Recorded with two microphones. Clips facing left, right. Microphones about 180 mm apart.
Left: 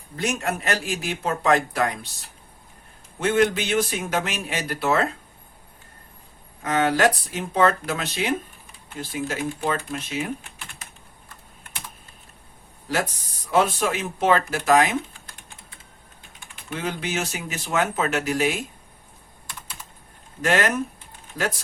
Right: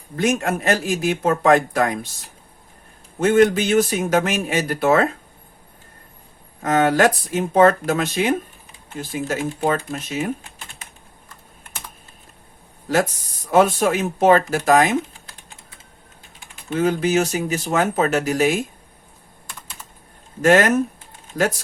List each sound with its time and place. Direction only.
0.2 s speech: 50° right (ahead or behind)
3.2 s speech: 45° right (ahead or behind)
6.6 s speech: 45° right (ahead or behind)
13.5 s speech: 50° right (ahead or behind)
16.7 s speech: 45° right (ahead or behind)
20.4 s speech: 45° right (ahead or behind)